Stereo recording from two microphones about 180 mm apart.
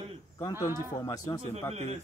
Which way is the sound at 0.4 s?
20° left (ahead or behind).